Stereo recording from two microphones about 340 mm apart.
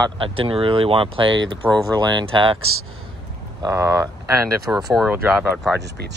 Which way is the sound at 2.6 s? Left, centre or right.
Right.